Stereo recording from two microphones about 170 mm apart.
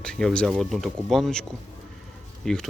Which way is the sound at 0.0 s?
5° left (ahead or behind).